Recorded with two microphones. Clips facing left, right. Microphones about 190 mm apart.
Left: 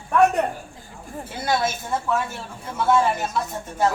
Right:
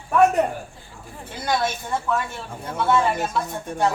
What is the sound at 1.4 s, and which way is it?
Speech, 5° left (ahead or behind).